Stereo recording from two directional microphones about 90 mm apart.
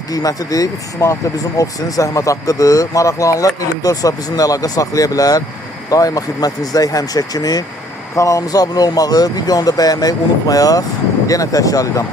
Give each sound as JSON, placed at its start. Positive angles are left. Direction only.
{"t": 0.1, "sound": "speech", "side_deg": 40}